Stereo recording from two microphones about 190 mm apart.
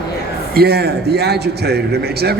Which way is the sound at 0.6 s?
55° right (ahead or behind).